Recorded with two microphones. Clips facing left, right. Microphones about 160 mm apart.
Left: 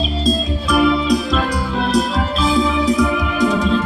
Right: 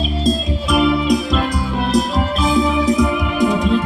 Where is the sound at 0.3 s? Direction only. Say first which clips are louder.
Even; 20° right (ahead or behind).